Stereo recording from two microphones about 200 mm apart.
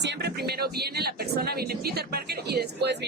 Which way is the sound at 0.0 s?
55° right (ahead or behind).